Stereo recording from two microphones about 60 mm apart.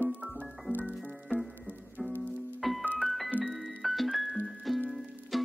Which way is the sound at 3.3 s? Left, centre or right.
Right.